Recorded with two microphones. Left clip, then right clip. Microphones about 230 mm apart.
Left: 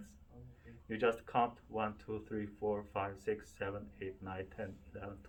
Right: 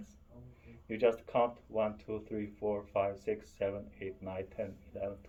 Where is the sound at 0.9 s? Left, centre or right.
Left.